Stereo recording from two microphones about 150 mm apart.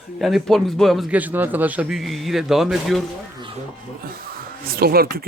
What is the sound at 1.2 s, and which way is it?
A man's voice, 10° right (ahead or behind).